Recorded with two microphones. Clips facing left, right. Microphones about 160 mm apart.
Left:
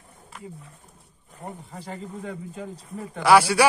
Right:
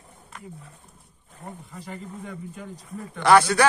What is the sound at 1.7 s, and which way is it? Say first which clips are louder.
Speech: even; 30° left (ahead or behind).